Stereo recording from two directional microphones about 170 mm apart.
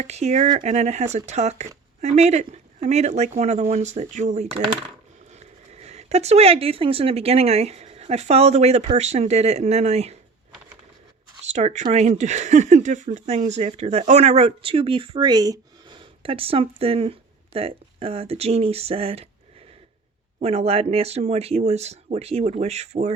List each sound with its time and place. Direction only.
0.0 s speech: 40° right (ahead or behind)
11.5 s speech: 45° right (ahead or behind)
20.4 s speech: 35° right (ahead or behind)